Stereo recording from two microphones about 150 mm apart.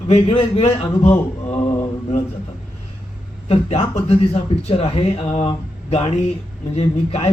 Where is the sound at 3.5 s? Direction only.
45° left (ahead or behind).